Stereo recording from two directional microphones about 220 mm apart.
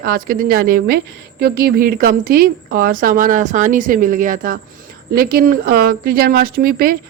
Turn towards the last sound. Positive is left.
turn(degrees=-40)  # may be behind; listen again after turning